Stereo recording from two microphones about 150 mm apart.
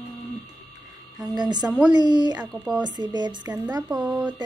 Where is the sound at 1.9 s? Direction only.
30° right (ahead or behind).